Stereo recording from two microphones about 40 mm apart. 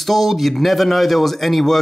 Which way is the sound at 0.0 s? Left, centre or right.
Centre.